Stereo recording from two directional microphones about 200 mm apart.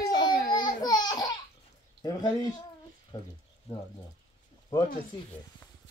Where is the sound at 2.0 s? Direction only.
20° left (ahead or behind).